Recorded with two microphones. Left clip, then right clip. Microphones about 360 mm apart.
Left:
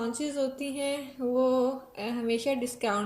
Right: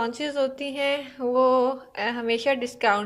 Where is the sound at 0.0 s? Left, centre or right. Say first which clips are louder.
Right 5 dB; centre.